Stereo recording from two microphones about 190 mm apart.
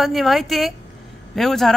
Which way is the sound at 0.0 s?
Centre (ahead or behind).